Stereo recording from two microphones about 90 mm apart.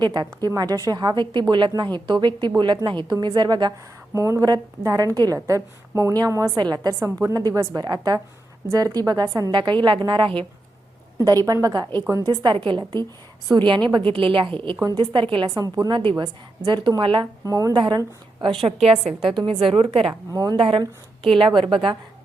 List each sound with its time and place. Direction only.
0.0 s a woman's voice: 55° right (ahead or behind)
4.1 s a woman's voice: 35° right (ahead or behind)
9.5 s a woman's voice: 60° right (ahead or behind)
11.4 s a woman's voice: 40° right (ahead or behind); by 15.4 s 70° right (ahead or behind)
15.4 s speech: 45° right (ahead or behind)
15.9 s a woman's voice: 60° right (ahead or behind)
17.5 s a woman's voice: 40° right (ahead or behind)
17.7 s a woman's voice: 65° right (ahead or behind); by 20.1 s 90° right
20.3 s speech: 45° right (ahead or behind)
20.6 s a woman's voice: 80° right